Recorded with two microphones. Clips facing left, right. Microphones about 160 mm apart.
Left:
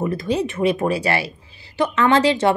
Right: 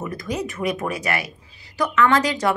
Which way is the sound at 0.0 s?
30° left (ahead or behind).